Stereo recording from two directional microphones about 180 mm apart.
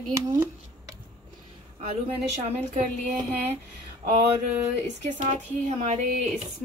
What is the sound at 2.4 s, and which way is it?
Speech, 40° right (ahead or behind).